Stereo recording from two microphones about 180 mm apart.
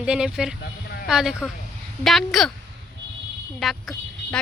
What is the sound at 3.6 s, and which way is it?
Speech, centre (ahead or behind).